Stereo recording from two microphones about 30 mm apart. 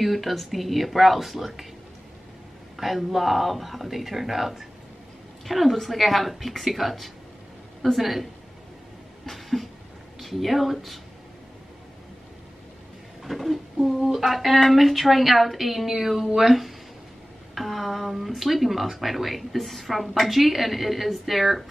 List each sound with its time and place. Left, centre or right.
0.0 s speech: centre
2.8 s speech: centre
9.2 s a sound: centre
10.2 s speech: centre
13.2 s a sound: centre
14.0 s speech: centre
14.3 s speech: centre